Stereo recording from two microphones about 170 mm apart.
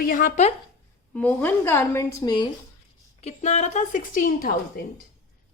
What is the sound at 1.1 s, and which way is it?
A woman's voice, 10° left (ahead or behind).